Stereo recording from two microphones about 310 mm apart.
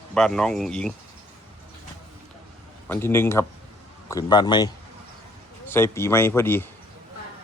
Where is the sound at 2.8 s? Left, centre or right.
Centre.